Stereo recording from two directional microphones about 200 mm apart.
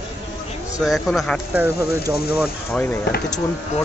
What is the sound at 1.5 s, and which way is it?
Speech, 10° right (ahead or behind).